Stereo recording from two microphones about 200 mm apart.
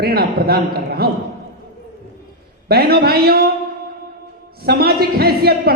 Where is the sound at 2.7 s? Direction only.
50° right (ahead or behind).